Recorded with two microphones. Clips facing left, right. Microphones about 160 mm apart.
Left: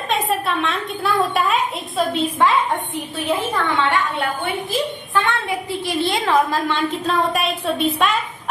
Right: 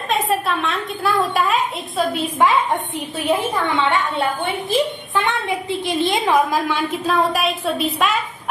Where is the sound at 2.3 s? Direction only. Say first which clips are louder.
Right 2 dB; 20° right (ahead or behind).